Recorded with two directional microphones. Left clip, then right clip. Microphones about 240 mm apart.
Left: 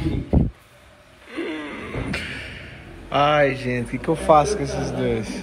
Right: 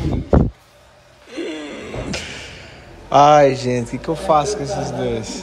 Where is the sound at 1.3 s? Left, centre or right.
Centre.